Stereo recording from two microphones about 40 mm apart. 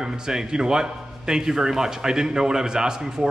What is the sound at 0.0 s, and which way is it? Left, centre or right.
A man's voice, centre.